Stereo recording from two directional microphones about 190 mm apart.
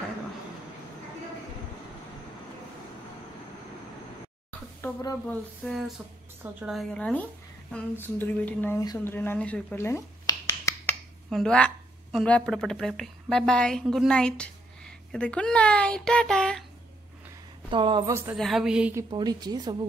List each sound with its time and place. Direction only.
4.8 s a woman's voice: 10° left (ahead or behind)
11.2 s a woman's voice: centre (ahead or behind)
17.6 s a woman's voice: 25° right (ahead or behind)
18.3 s a woman's voice: centre (ahead or behind)
18.9 s a woman's voice: 20° right (ahead or behind)